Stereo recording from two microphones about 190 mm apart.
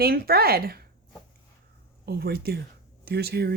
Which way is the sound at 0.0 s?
55° right (ahead or behind).